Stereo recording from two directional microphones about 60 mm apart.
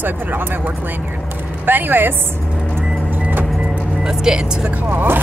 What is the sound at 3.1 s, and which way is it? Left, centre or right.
Vehicle, right.